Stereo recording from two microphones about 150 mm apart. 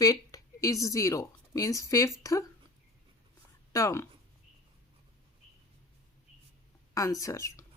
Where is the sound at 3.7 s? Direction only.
20° left (ahead or behind).